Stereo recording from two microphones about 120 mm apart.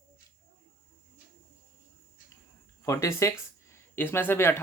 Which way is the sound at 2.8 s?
25° left (ahead or behind).